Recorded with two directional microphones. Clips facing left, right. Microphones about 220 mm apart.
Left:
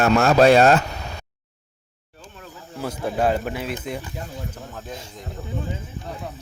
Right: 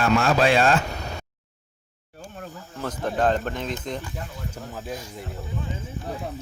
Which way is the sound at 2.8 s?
10° left (ahead or behind).